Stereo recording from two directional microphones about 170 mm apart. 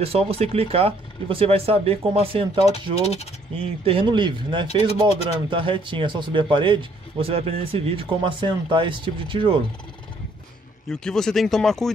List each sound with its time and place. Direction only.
0.0 s speech: 35° right (ahead or behind)
2.6 s speech: 40° left (ahead or behind)
3.8 s speech: 30° right (ahead or behind)
4.6 s speech: 35° left (ahead or behind)
5.5 s speech: 30° right (ahead or behind)
10.9 s speech: 5° left (ahead or behind)